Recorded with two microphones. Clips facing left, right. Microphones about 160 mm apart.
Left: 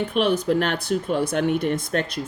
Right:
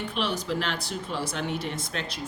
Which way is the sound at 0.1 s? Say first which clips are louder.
Left 9 dB; 55° left (ahead or behind).